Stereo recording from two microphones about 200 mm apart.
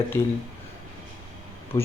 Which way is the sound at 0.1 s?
10° left (ahead or behind).